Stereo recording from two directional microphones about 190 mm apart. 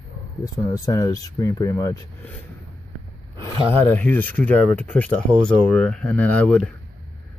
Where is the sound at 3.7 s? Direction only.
10° left (ahead or behind).